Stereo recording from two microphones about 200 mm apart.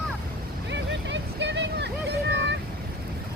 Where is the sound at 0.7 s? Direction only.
65° right (ahead or behind).